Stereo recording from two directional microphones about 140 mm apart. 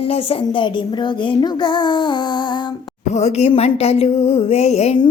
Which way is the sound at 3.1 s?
55° left (ahead or behind).